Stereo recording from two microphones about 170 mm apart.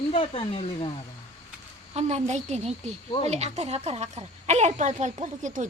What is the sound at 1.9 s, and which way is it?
A woman's voice, 40° right (ahead or behind).